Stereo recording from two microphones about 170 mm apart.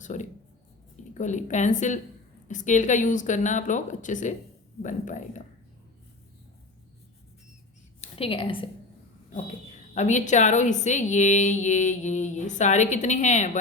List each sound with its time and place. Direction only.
0.0 s a woman's voice: 45° left (ahead or behind)
8.1 s a woman's voice: 35° left (ahead or behind)
9.9 s a woman's voice: 45° left (ahead or behind)